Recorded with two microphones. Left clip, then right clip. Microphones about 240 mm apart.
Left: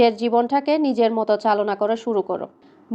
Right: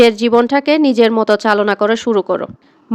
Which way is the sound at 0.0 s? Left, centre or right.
Right.